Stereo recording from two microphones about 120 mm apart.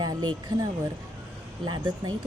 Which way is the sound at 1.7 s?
40° right (ahead or behind).